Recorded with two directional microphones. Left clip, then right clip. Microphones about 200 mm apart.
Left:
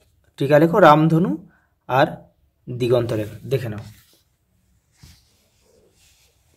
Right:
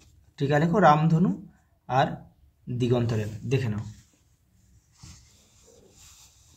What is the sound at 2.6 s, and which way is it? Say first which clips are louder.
Speech: left 8 dB; 35° left (ahead or behind).